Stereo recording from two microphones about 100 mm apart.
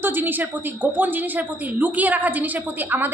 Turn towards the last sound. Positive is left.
turn(degrees=-20)  # may be behind; listen again after turning